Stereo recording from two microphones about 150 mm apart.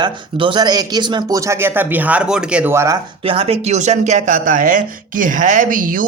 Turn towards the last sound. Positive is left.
turn(degrees=-65)  # may be behind; listen again after turning